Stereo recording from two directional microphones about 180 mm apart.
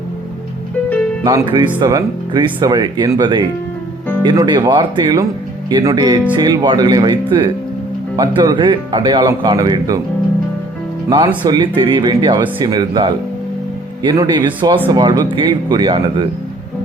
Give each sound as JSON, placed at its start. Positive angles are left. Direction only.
{"t": 1.2, "sound": "speech", "side_deg": -25}
{"t": 11.4, "sound": "speech", "side_deg": -25}